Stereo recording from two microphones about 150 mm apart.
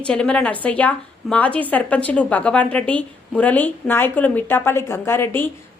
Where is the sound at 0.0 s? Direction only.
5° left (ahead or behind).